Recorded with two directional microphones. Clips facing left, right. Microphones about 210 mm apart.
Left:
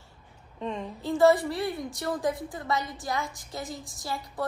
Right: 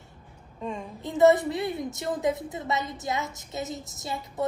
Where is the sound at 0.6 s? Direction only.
10° right (ahead or behind).